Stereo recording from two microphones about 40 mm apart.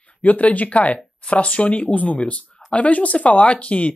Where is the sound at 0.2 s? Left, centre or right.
Left.